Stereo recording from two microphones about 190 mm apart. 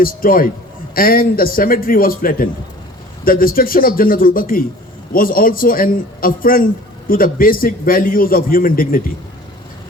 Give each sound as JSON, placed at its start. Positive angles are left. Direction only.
{"t": 0.0, "sound": "a man's voice", "side_deg": 50}